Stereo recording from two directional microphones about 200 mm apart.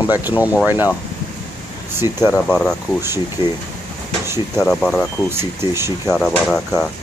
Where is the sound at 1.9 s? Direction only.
10° right (ahead or behind).